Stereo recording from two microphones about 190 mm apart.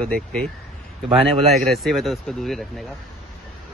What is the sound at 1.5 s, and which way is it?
Speech, centre (ahead or behind).